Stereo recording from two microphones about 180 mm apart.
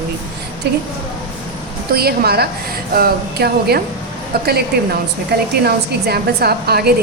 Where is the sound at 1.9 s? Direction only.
60° right (ahead or behind).